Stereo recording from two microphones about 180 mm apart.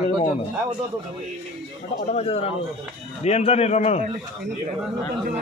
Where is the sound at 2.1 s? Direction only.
35° left (ahead or behind).